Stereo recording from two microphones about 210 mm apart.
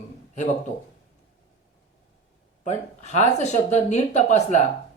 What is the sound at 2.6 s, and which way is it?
Speech, 35° left (ahead or behind).